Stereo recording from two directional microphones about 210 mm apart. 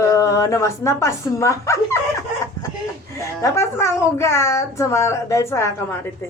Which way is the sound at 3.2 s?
15° left (ahead or behind).